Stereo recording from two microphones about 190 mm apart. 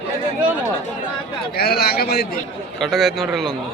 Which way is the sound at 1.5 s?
55° left (ahead or behind).